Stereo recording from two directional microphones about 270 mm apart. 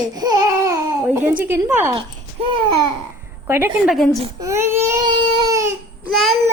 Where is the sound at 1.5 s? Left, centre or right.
Centre.